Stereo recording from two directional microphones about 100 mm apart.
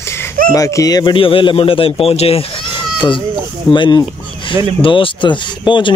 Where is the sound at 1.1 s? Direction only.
60° left (ahead or behind).